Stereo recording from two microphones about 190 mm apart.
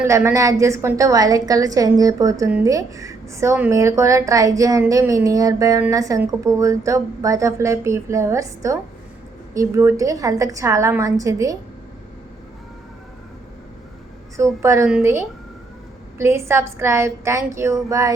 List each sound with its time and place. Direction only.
0.0 s a woman's voice: 10° right (ahead or behind)
14.3 s a woman's voice: 15° right (ahead or behind)